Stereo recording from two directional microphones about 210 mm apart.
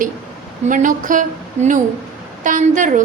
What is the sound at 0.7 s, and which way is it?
A woman's voice, 40° right (ahead or behind).